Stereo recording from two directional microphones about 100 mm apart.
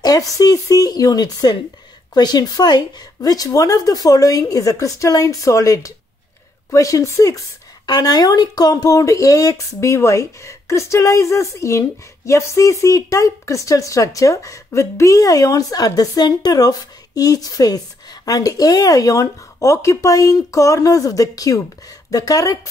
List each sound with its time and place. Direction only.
0.0 s speech: 40° left (ahead or behind)